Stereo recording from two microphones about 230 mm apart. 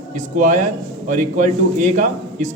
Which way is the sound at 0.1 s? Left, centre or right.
Right.